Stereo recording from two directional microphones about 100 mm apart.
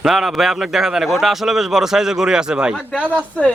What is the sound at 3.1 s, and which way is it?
Speech, 15° left (ahead or behind).